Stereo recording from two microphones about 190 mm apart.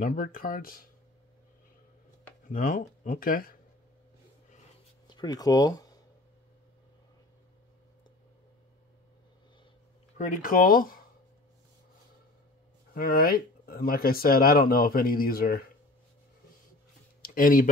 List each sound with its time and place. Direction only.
0.0 s speech: 45° left (ahead or behind)
2.4 s speech: 45° left (ahead or behind)
5.0 s speech: 20° left (ahead or behind)
10.1 s speech: 40° left (ahead or behind)
12.9 s speech: 50° left (ahead or behind)
17.2 s a sound: 45° left (ahead or behind)